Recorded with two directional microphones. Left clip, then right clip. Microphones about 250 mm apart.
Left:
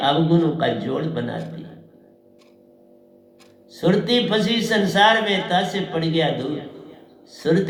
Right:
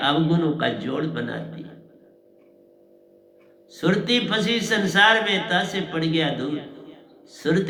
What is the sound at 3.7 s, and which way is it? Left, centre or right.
A man's voice, right.